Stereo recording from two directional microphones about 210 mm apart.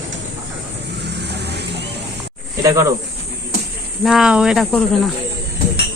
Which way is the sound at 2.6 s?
15° right (ahead or behind).